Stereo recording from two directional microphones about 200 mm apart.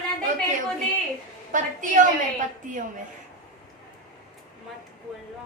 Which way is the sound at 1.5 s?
40° right (ahead or behind).